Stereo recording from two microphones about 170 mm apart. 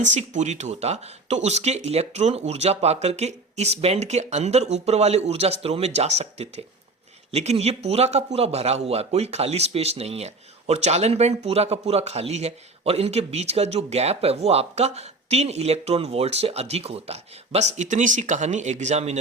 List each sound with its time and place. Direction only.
0.1 s speech: 45° right (ahead or behind)